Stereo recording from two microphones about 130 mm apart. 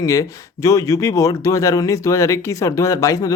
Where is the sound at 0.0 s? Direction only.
25° left (ahead or behind).